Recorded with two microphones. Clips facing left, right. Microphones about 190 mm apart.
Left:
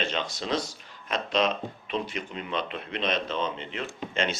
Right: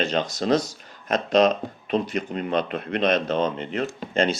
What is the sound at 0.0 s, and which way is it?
Speech, 40° right (ahead or behind).